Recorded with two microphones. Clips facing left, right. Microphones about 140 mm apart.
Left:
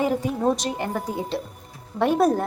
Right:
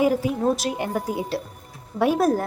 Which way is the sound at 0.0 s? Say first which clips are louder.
Right 2 dB; 5° right (ahead or behind).